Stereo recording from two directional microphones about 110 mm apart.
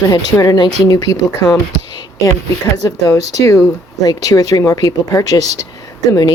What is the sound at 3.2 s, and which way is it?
Speech, 85° right.